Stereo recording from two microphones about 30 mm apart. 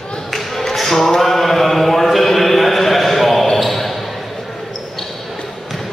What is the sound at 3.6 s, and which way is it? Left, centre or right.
Basketball bounce, centre.